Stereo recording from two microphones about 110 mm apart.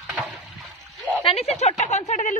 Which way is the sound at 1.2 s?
70° left (ahead or behind).